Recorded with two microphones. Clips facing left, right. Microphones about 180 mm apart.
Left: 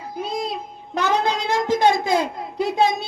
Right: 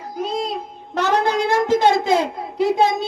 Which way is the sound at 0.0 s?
40° right (ahead or behind).